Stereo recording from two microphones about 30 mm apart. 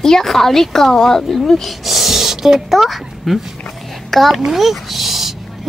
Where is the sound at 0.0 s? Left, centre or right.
Centre.